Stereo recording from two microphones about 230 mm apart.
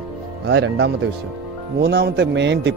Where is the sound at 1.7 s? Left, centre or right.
Right.